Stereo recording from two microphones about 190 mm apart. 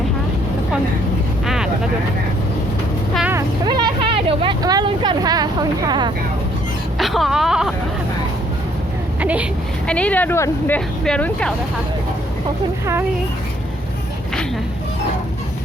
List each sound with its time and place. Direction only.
1.5 s vehicle: 5° right (ahead or behind)
3.2 s vehicle: 10° right (ahead or behind)
3.7 s a sound: 25° right (ahead or behind)
7.0 s speech: centre (ahead or behind)
9.2 s speech: 5° right (ahead or behind)
9.8 s speech: 5° left (ahead or behind)
12.8 s speech: 15° right (ahead or behind)